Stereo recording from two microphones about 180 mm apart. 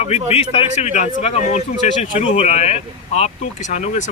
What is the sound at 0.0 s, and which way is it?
A man's voice, 35° left (ahead or behind).